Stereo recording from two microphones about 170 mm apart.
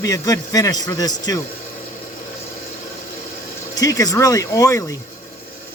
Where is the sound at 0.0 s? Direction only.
20° left (ahead or behind).